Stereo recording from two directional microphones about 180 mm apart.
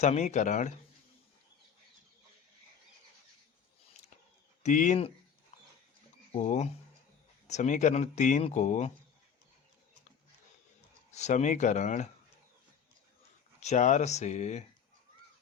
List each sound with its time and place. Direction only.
0.0 s speech: 40° left (ahead or behind)
4.6 s speech: 45° left (ahead or behind)
6.3 s speech: 40° left (ahead or behind)
11.1 s speech: 40° left (ahead or behind)
13.6 s speech: 40° left (ahead or behind)